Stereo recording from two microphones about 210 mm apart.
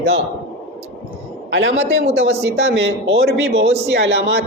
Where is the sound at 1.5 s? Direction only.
55° right (ahead or behind).